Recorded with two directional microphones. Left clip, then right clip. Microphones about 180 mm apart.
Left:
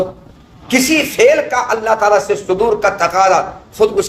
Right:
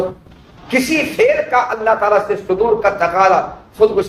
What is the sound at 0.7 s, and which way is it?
Speech, 55° left (ahead or behind).